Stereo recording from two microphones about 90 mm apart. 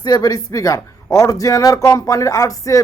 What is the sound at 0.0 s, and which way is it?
Speech, 45° left (ahead or behind).